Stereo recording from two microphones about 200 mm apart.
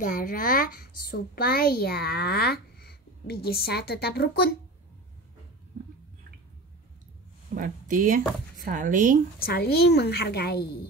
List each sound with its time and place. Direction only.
0.0 s a woman's voice: 40° left (ahead or behind)
7.5 s speech: 40° right (ahead or behind)
9.4 s a woman's voice: 50° left (ahead or behind)